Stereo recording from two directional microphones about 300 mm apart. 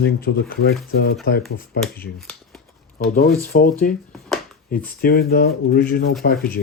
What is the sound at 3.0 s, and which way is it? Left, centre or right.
Speech, left.